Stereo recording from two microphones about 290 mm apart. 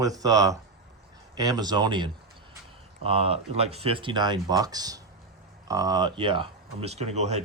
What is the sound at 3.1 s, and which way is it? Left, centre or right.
Speech, centre.